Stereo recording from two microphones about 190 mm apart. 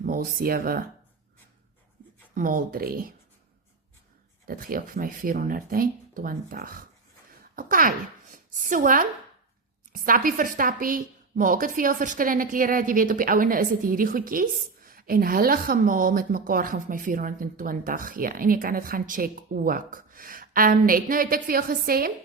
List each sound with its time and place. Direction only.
0.0 s a woman's voice: 50° right (ahead or behind)
2.3 s a woman's voice: 45° right (ahead or behind)
4.4 s a woman's voice: 50° right (ahead or behind)